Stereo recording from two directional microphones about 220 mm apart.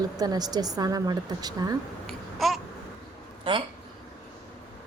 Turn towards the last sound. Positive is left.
turn(degrees=-25)  # may be behind; listen again after turning